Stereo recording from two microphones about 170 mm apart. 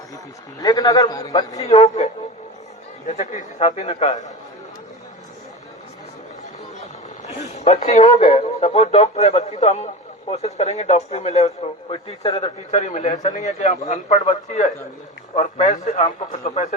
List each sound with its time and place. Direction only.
0.6 s a man's voice: 20° left (ahead or behind)
1.6 s speech: 40° left (ahead or behind)
3.1 s speech: 45° left (ahead or behind)
7.5 s a man's voice: 40° left (ahead or behind)